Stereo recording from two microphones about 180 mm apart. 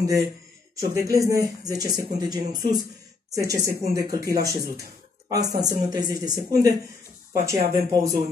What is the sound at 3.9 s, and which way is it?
Speech, 20° right (ahead or behind).